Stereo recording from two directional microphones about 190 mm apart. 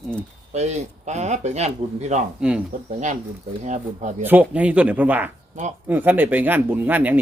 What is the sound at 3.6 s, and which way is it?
Speech, 40° right (ahead or behind).